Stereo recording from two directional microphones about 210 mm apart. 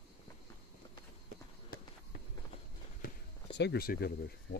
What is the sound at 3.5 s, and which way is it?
Speech, 50° left (ahead or behind).